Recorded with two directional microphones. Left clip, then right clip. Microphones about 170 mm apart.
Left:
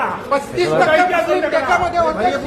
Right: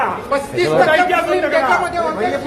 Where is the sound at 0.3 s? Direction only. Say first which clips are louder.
Left 2 dB; 5° right (ahead or behind).